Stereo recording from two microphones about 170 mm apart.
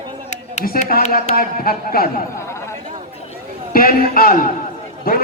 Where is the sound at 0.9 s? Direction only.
50° left (ahead or behind).